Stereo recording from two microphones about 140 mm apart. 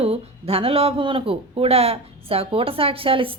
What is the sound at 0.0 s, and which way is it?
Speech, 45° right (ahead or behind).